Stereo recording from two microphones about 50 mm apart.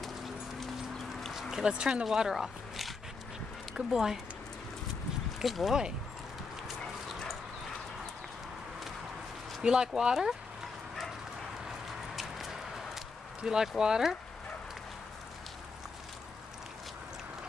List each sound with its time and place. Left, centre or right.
0.0 s dog: centre
1.3 s a sound: centre
1.7 s speech: right
2.0 s speech: centre
3.9 s speech: centre
5.4 s speech: centre
9.6 s speech: centre
12.2 s a sound: centre
13.4 s speech: centre